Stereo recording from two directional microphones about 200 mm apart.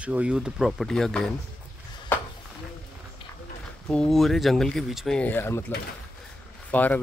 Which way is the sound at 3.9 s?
5° left (ahead or behind).